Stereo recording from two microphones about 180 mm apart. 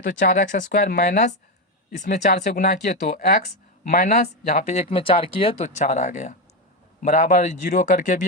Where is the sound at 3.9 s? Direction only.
50° left (ahead or behind).